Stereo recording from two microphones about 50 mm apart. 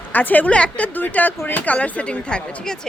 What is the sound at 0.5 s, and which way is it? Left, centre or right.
Speech, left.